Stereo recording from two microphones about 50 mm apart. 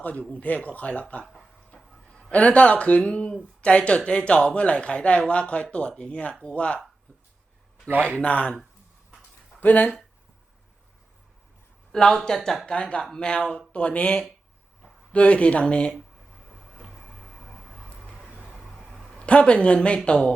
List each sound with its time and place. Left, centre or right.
0.0 s speech: left
2.3 s speech: left
8.2 s speech: left
9.6 s speech: left
11.9 s speech: centre
16.8 s vehicle: centre
18.0 s vehicle: centre
18.4 s a sound: centre
19.2 s speech: left